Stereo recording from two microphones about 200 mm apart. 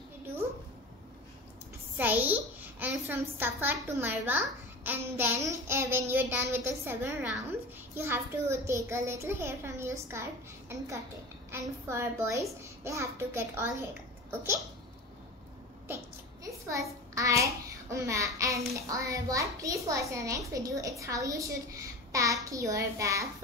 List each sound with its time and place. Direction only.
2.0 s a child's voice: 10° right (ahead or behind)
11.5 s a child's voice: 15° right (ahead or behind)
16.4 s a child's voice: 15° right (ahead or behind)